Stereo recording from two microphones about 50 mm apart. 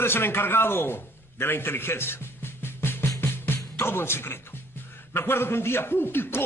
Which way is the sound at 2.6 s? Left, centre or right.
Left.